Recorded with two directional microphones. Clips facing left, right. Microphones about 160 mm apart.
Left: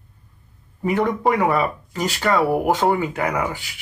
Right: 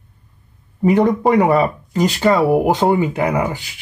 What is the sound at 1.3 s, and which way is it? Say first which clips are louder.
Speech: right 5 dB; 25° right (ahead or behind).